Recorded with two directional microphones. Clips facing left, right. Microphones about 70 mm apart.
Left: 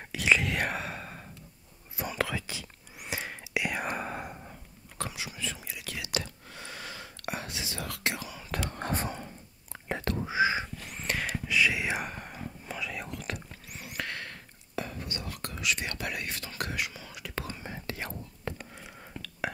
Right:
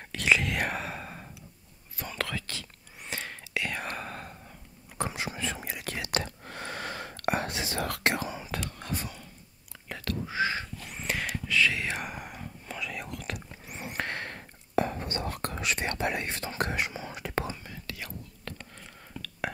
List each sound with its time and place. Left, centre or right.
0.1 s whispering: centre
5.1 s whispering: right
8.6 s whispering: left
10.3 s a sound: centre
10.9 s whispering: centre
11.4 s whispering: centre
12.1 s whispering: centre
12.4 s whispering: centre
13.7 s whispering: right
17.6 s whispering: left
18.5 s a sound: centre
19.5 s whispering: centre